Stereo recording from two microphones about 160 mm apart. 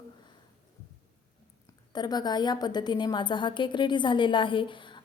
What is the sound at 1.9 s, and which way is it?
A woman's voice, 25° left (ahead or behind).